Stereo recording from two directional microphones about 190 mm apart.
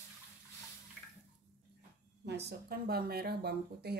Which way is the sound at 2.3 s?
60° right (ahead or behind).